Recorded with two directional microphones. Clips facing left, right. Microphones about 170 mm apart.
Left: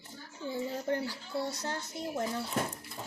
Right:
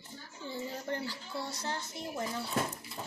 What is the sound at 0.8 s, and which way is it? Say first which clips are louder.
A woman's voice: left 4 dB; 55° left (ahead or behind).